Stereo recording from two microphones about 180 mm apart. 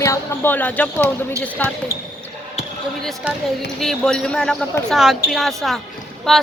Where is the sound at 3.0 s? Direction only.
Centre (ahead or behind).